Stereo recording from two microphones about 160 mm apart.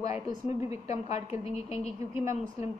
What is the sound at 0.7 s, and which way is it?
A woman's voice, 45° left (ahead or behind).